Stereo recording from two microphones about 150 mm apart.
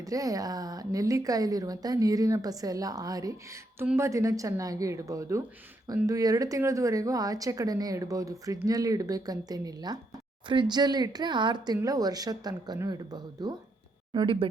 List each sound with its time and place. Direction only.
0.0 s speech: 25° right (ahead or behind)